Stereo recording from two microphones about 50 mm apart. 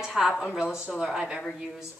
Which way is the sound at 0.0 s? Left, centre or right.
Centre.